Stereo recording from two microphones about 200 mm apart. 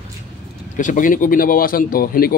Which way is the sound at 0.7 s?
40° left (ahead or behind).